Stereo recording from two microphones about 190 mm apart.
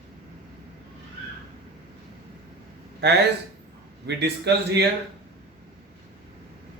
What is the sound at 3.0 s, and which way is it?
Speech, 60° right (ahead or behind).